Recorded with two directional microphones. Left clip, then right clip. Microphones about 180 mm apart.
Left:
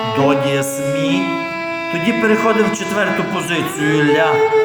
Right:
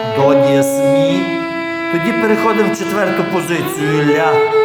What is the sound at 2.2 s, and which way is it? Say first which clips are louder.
A man's voice: even; 30° right (ahead or behind).